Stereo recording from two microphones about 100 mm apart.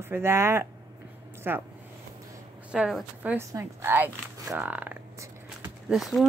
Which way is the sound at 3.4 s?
25° right (ahead or behind).